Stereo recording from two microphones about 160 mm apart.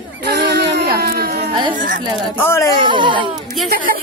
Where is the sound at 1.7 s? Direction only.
55° right (ahead or behind).